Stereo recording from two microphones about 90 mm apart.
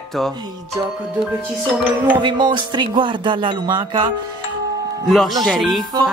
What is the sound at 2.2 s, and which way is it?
Speech, 60° right (ahead or behind).